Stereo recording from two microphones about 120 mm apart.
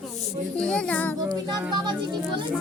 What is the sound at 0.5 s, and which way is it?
Speech, 10° left (ahead or behind).